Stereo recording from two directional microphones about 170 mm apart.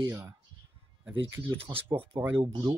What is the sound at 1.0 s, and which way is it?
Speech, 90° right.